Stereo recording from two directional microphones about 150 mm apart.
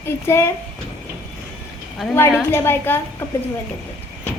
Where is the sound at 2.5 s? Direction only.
15° left (ahead or behind).